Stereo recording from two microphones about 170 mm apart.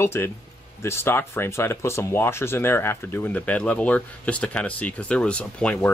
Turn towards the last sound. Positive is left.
turn(degrees=10)  # may be behind; listen again after turning